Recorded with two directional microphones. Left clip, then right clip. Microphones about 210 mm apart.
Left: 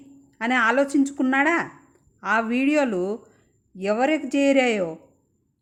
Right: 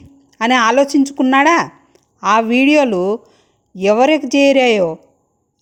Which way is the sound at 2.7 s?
30° right (ahead or behind).